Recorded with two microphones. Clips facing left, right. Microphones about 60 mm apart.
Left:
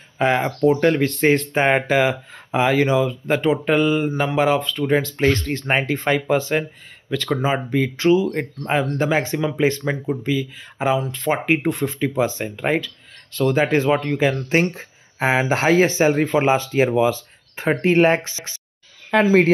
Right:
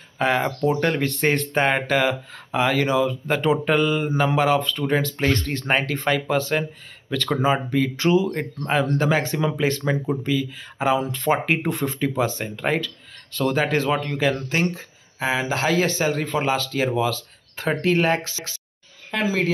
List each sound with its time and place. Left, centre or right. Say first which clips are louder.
0.2 s speech: left 3 dB; centre
14.5 s speech: left 4 dB; left
19.2 s speech: left 6 dB; left